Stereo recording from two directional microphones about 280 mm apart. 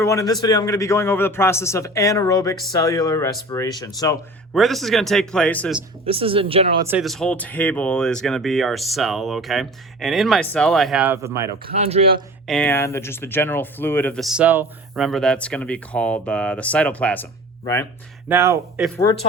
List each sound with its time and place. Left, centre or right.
0.0 s a man's voice: centre
4.5 s speech: centre
6.1 s speech: centre
6.8 s speech: centre
11.6 s speech: right
12.5 s speech: centre
18.3 s speech: centre